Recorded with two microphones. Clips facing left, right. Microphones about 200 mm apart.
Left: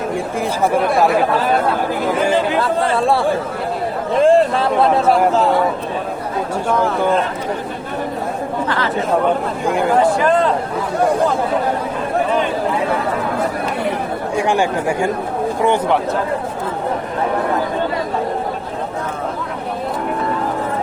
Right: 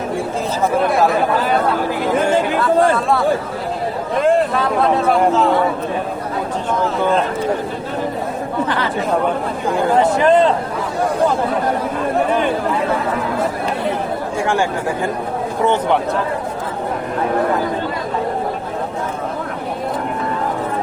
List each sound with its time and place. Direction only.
4.2 s speech: 30° left (ahead or behind)
9.6 s speech: 15° left (ahead or behind)
10.0 s speech: 20° right (ahead or behind)
14.3 s speech: 15° left (ahead or behind)